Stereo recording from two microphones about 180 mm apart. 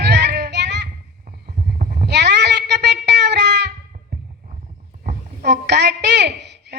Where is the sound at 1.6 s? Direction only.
55° right (ahead or behind); by 3.7 s 75° right (ahead or behind).